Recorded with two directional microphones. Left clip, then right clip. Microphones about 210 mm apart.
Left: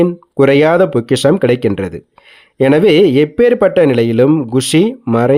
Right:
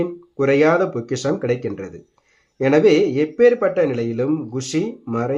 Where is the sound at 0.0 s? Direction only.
40° left (ahead or behind).